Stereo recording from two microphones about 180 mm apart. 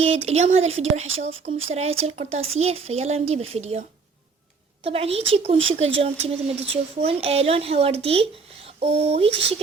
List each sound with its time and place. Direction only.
0.0 s speech: 35° right (ahead or behind)